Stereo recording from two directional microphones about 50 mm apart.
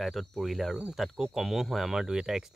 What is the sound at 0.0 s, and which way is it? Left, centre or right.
Speech, centre.